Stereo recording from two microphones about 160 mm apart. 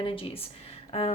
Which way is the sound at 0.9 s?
40° left (ahead or behind).